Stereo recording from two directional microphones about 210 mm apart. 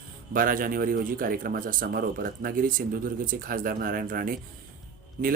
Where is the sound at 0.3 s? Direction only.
40° right (ahead or behind).